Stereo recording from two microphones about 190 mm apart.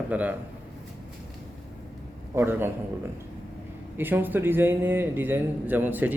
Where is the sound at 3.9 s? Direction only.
10° right (ahead or behind).